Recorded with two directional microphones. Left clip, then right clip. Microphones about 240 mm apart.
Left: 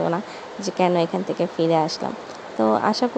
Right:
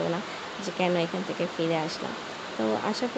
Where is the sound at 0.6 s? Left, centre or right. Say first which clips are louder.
Left 7 dB; left.